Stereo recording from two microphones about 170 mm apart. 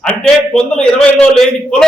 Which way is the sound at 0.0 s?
5° left (ahead or behind).